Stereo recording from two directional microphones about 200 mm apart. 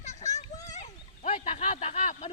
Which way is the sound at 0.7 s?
35° left (ahead or behind).